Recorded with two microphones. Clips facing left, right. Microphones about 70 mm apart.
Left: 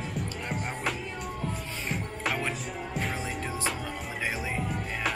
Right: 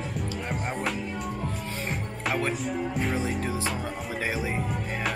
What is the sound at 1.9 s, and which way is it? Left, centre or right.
Music, centre.